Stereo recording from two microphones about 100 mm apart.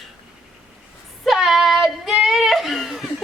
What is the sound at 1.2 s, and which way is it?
Child singing, centre (ahead or behind).